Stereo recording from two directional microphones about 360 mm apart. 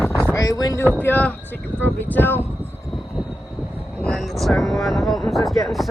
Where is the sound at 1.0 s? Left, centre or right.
Centre.